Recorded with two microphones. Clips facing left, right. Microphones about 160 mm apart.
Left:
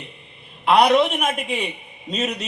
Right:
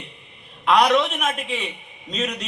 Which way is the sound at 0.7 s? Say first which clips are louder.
Left 2 dB; 30° left (ahead or behind).